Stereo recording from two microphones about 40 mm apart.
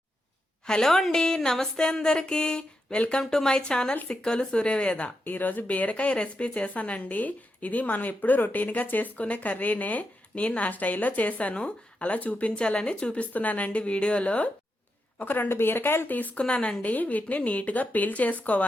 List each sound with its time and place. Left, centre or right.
0.7 s speech: centre
4.4 s speech: left
5.2 s speech: left
13.3 s speech: left
15.2 s speech: left
15.4 s speech: left
16.0 s speech: left
16.4 s speech: left
16.8 s speech: left